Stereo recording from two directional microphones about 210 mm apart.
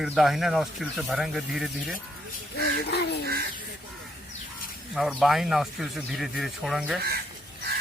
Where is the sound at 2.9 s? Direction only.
50° left (ahead or behind).